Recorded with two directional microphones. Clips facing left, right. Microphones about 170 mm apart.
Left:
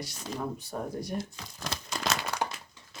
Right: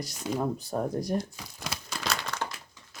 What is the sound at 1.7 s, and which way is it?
Crumpling, centre (ahead or behind).